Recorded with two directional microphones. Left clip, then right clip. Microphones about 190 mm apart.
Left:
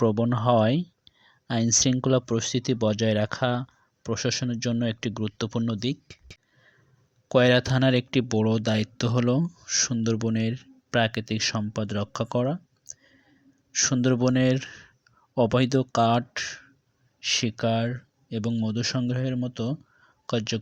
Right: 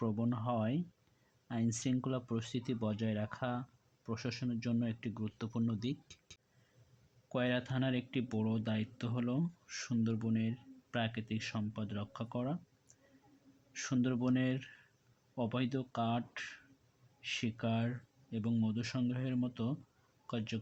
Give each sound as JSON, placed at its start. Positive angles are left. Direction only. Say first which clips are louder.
{"t": 0.0, "sound": "speech", "louder": "left 15 dB", "side_deg": 40}
{"t": 7.3, "sound": "speech", "louder": "left 16 dB", "side_deg": 45}
{"t": 13.7, "sound": "speech", "louder": "left 13 dB", "side_deg": 40}